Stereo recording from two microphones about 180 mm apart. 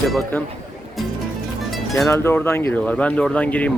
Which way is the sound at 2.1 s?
15° left (ahead or behind).